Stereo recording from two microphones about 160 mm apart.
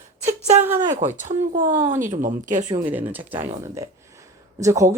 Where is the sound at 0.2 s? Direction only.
45° right (ahead or behind).